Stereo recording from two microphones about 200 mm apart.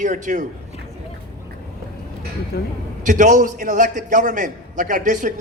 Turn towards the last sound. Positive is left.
turn(degrees=-40)  # may be behind; listen again after turning